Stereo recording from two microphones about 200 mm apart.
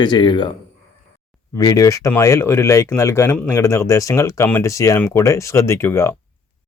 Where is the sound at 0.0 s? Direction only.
20° left (ahead or behind).